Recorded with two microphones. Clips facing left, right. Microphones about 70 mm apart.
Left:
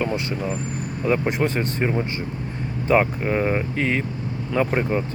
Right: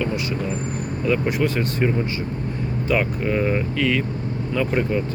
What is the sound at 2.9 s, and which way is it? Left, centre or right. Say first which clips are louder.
Speech: left 3 dB; left.